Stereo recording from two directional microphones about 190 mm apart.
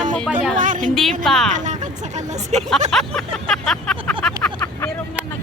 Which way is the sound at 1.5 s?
40° right (ahead or behind).